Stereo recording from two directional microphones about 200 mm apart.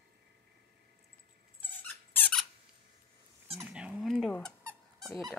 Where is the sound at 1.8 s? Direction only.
10° left (ahead or behind).